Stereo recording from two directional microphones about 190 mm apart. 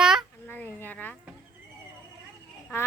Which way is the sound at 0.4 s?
10° left (ahead or behind).